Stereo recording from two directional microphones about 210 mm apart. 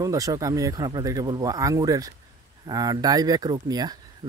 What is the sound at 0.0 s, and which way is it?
Speech, 15° right (ahead or behind).